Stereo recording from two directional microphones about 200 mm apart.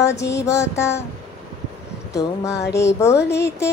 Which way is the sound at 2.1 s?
15° left (ahead or behind).